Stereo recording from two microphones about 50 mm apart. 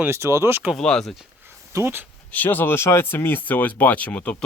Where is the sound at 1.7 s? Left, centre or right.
Right.